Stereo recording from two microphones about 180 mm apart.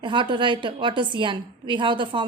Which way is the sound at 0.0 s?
25° right (ahead or behind).